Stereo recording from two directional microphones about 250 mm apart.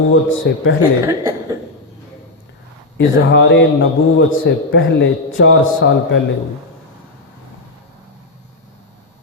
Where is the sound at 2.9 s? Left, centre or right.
Left.